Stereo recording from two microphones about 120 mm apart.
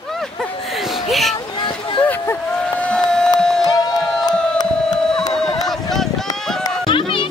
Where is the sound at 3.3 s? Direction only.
5° left (ahead or behind).